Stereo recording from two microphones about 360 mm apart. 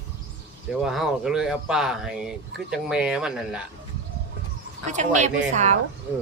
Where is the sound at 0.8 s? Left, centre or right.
Centre.